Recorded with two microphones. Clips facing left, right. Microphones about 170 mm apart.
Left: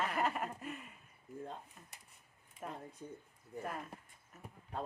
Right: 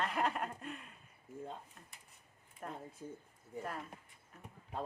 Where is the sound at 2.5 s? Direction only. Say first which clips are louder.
Even; centre (ahead or behind).